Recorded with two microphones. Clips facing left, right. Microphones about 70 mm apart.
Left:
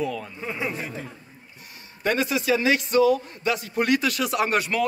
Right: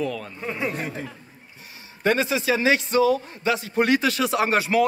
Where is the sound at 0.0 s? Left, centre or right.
Centre.